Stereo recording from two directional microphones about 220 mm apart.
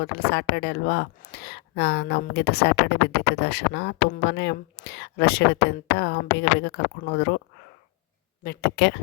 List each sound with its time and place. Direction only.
0.0 s speech: 50° left (ahead or behind)
8.4 s speech: 50° left (ahead or behind)